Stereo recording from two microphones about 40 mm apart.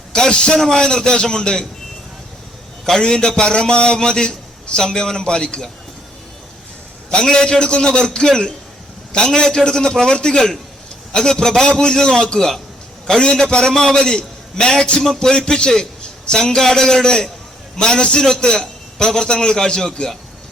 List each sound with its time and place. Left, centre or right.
0.1 s a man's voice: left
3.0 s a man's voice: centre
7.1 s a man's voice: centre